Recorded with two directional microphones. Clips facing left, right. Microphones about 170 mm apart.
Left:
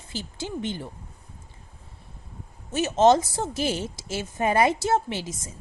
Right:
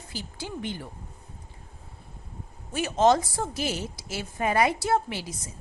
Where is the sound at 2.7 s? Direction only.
25° left (ahead or behind).